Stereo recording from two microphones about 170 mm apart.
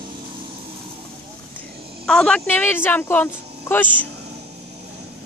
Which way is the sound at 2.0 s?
5° left (ahead or behind).